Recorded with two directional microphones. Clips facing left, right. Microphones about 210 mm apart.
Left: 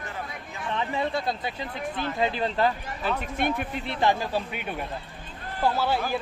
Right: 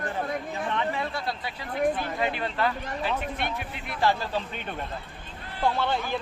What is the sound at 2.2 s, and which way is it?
Speech, 30° left (ahead or behind).